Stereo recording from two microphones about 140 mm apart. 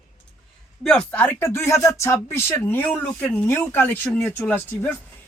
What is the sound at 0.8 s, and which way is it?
Speech, 5° left (ahead or behind).